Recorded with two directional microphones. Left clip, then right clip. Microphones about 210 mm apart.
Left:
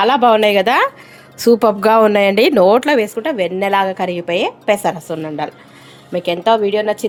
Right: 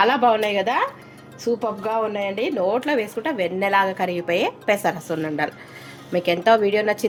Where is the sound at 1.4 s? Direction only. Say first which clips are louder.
Left 12 dB; 55° left (ahead or behind); by 7.0 s 15° left (ahead or behind).